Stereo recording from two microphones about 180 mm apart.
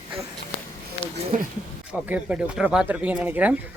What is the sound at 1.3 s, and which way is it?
Speech, 45° right (ahead or behind).